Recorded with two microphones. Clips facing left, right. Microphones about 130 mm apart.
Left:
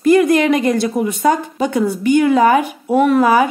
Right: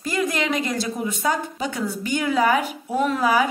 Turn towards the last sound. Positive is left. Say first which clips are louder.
# left 8 dB
turn(degrees=60)  # may be behind; listen again after turning